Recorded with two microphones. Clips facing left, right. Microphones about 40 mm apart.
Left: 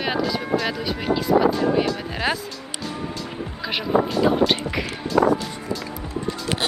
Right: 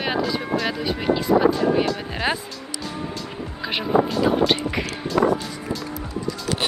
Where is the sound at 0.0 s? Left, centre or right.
Centre.